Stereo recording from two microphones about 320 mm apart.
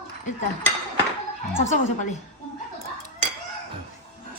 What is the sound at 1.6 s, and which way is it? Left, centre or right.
Speech, left.